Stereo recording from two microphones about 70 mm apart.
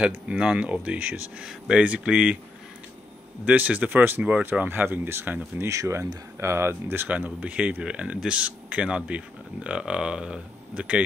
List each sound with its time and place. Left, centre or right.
0.0 s speech: centre
3.4 s speech: right
5.7 s speech: right; by 11.0 s centre